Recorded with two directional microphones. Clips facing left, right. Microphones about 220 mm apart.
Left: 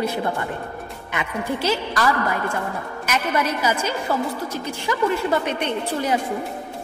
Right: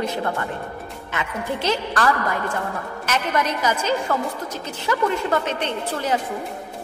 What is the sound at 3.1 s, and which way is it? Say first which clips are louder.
A woman's voice: even; 10° left (ahead or behind).